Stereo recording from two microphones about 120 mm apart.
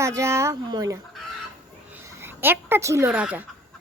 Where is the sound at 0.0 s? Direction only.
25° right (ahead or behind).